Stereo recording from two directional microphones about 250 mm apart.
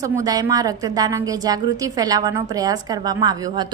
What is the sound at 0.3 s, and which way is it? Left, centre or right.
A woman's voice, centre.